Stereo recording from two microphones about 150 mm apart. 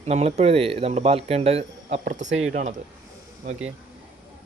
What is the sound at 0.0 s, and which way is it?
Speech, 45° right (ahead or behind).